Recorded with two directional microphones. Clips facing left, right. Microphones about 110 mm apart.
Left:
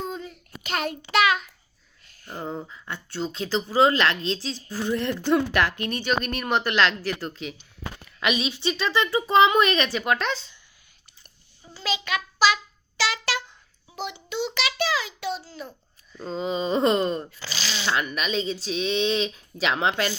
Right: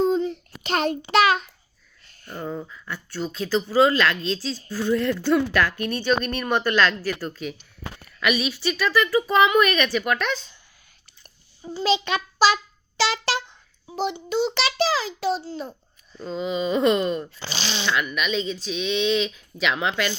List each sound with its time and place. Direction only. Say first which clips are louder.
0.0 s child singing: right 12 dB; 25° right (ahead or behind)
2.2 s a woman's voice: right 1 dB; 30° left (ahead or behind)
11.7 s a child's voice: right 6 dB; 30° right (ahead or behind)
13.0 s a sound: right 3 dB; 30° right (ahead or behind)
13.8 s a child's voice: right 7 dB; 30° right (ahead or behind)
16.1 s speech: right 1 dB; 35° left (ahead or behind)
17.3 s a child's voice: right 3 dB; 25° right (ahead or behind)
17.8 s speech: right 1 dB; 35° left (ahead or behind)